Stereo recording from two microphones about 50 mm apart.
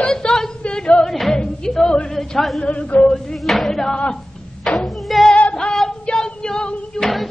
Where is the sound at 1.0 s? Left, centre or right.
Centre.